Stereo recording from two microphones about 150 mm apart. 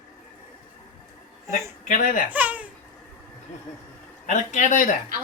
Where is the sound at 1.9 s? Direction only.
60° left (ahead or behind).